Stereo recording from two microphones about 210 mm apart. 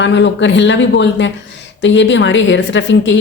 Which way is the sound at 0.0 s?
60° left (ahead or behind).